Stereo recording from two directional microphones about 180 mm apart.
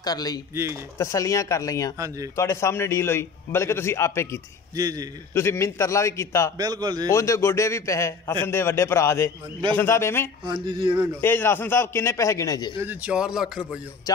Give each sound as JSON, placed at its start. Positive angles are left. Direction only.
{"t": 0.0, "sound": "a man's voice", "side_deg": 20}
{"t": 2.0, "sound": "speech", "side_deg": -20}
{"t": 2.3, "sound": "a man's voice", "side_deg": 15}
{"t": 4.7, "sound": "speech", "side_deg": -20}
{"t": 5.3, "sound": "a man's voice", "side_deg": 15}
{"t": 6.6, "sound": "speech", "side_deg": -20}
{"t": 7.1, "sound": "a man's voice", "side_deg": 15}
{"t": 10.4, "sound": "speech", "side_deg": -25}
{"t": 11.1, "sound": "a man's voice", "side_deg": 10}
{"t": 12.7, "sound": "speech", "side_deg": -10}
{"t": 14.1, "sound": "speech", "side_deg": 20}